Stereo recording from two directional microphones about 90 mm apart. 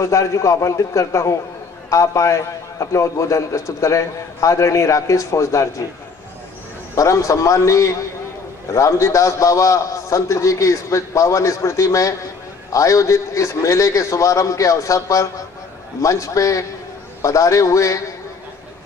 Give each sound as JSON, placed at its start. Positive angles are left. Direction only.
{"t": 0.0, "sound": "a man's voice", "side_deg": 35}
{"t": 7.0, "sound": "a man's voice", "side_deg": 35}